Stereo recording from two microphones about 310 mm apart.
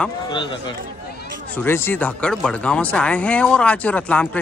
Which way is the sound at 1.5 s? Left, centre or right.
Centre.